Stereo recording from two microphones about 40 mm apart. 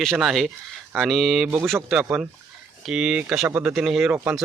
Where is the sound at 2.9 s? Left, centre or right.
Right.